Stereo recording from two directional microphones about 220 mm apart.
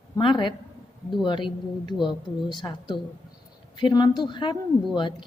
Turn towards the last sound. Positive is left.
turn(degrees=20)  # may be behind; listen again after turning